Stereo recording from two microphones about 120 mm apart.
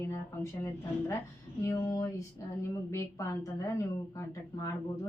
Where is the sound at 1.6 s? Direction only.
25° left (ahead or behind).